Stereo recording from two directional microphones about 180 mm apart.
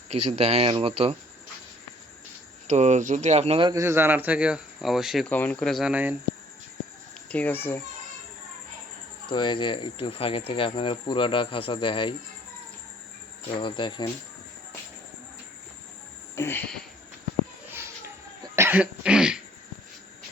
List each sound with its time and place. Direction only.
0.1 s speech: 35° right (ahead or behind)
2.6 s speech: 40° right (ahead or behind)
3.7 s speech: 15° right (ahead or behind)
7.3 s speech: 10° left (ahead or behind)
9.3 s speech: 25° left (ahead or behind)
13.6 s speech: 25° left (ahead or behind)
16.3 s a sound: 15° left (ahead or behind)
17.7 s cough: 15° right (ahead or behind)